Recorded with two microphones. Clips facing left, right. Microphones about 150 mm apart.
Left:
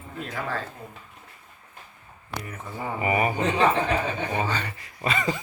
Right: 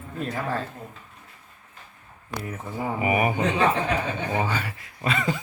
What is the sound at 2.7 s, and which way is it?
A woman's voice, 10° right (ahead or behind).